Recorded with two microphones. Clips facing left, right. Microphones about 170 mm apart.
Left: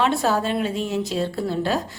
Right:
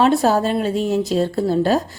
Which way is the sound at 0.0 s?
40° right (ahead or behind).